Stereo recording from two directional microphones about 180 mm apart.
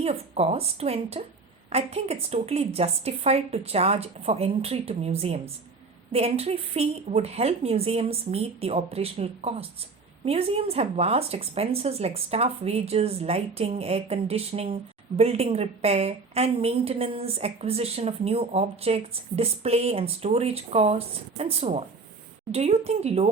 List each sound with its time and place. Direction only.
0.0 s speech: 35° right (ahead or behind)